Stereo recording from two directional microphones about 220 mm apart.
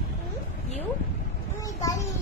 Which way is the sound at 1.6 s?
15° left (ahead or behind).